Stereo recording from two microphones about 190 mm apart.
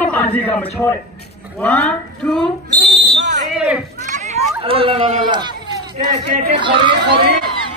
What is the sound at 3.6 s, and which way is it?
Speech, 5° right (ahead or behind).